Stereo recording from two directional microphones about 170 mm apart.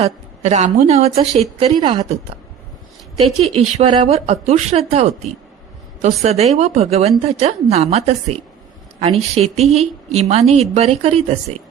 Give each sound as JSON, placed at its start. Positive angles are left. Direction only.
{"t": 0.0, "sound": "a woman's voice", "side_deg": -40}
{"t": 3.3, "sound": "a woman's voice", "side_deg": -40}